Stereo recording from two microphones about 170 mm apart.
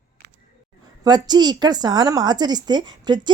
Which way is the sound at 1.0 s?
25° right (ahead or behind).